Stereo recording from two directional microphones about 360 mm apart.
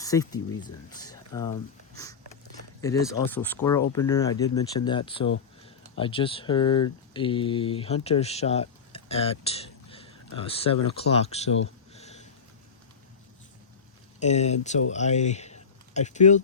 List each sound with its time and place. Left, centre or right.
0.0 s speech: centre
2.8 s speech: centre
8.9 s a sound: centre
9.9 s speech: centre
11.9 s a sound: centre
14.2 s speech: centre